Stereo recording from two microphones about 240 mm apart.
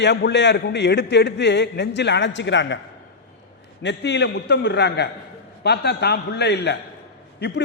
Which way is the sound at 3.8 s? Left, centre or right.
Left.